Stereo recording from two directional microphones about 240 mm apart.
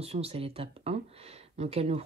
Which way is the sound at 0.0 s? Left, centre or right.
Right.